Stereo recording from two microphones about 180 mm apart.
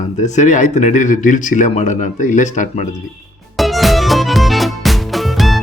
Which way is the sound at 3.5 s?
Centre (ahead or behind).